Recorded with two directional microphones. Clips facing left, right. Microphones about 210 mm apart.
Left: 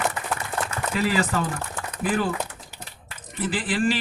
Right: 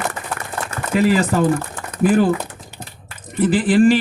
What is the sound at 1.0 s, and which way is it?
Speech, 50° right (ahead or behind).